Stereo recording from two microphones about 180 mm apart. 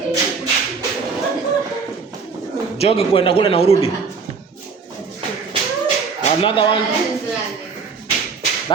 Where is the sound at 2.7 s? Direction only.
30° left (ahead or behind).